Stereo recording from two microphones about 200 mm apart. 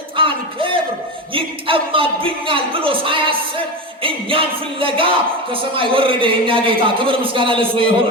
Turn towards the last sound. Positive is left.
turn(degrees=-25)  # may be behind; listen again after turning